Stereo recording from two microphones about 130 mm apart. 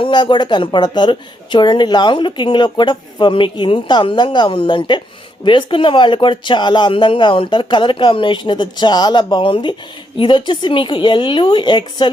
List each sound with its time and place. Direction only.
0.0 s speech: 35° left (ahead or behind)